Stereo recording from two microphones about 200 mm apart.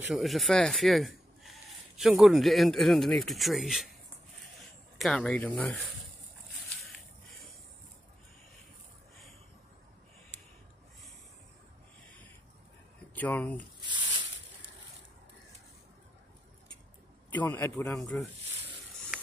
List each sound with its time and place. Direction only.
0.1 s speech: centre (ahead or behind)
5.0 s speech: 5° left (ahead or behind)
13.1 s speech: 10° left (ahead or behind)
13.7 s a sound: 25° right (ahead or behind)
17.3 s speech: 10° left (ahead or behind)